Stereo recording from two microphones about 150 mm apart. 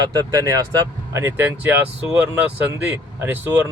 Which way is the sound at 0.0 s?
25° right (ahead or behind).